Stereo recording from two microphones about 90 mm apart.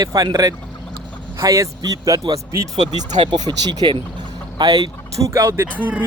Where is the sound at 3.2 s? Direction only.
60° right (ahead or behind).